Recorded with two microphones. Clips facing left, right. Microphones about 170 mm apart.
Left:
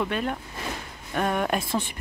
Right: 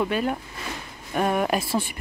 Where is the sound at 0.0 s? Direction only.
5° right (ahead or behind).